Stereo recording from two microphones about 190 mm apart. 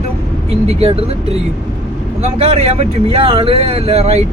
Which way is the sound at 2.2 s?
30° right (ahead or behind).